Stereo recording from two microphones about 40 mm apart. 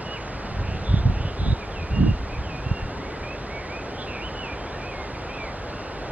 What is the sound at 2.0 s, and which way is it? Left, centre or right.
Rustling leaves, right.